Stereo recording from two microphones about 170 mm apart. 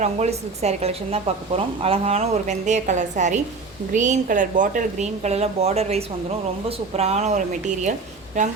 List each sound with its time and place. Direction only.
0.0 s speech: 40° right (ahead or behind)